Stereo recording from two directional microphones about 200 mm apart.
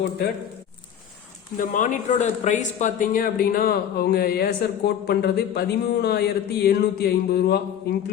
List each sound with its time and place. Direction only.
1.5 s speech: 40° left (ahead or behind)